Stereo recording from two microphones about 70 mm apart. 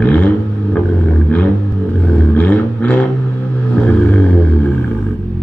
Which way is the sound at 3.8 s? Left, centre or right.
Left.